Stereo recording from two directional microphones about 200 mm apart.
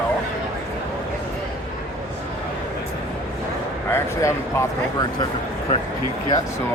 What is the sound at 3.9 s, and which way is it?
Speech, 15° left (ahead or behind).